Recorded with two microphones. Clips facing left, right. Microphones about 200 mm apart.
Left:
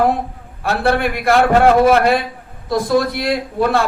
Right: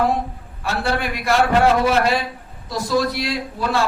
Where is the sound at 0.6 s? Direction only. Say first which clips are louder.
Left 6 dB; 55° left (ahead or behind).